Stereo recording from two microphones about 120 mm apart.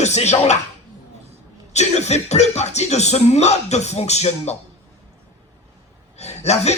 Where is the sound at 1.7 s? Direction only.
70° left (ahead or behind).